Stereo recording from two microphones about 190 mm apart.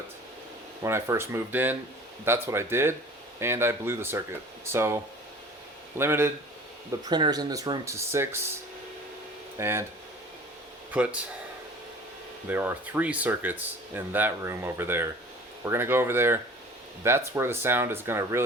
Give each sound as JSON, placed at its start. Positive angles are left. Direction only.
{"t": 0.9, "sound": "speech", "side_deg": -15}
{"t": 6.0, "sound": "speech", "side_deg": -15}
{"t": 9.6, "sound": "speech", "side_deg": -15}
{"t": 10.9, "sound": "speech", "side_deg": -5}
{"t": 12.5, "sound": "speech", "side_deg": -10}